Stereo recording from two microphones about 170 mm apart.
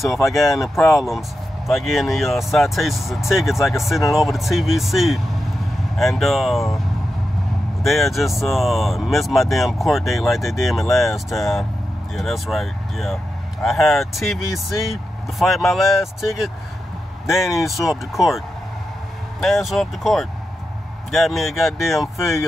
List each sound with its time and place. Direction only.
0.0 s speech: centre (ahead or behind)
0.5 s speech: 15° left (ahead or behind)
1.7 s speech: centre (ahead or behind)
7.8 s speech: centre (ahead or behind)
19.4 s speech: centre (ahead or behind)